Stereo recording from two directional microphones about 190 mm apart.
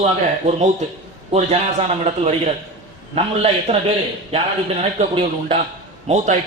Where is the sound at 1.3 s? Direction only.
35° right (ahead or behind).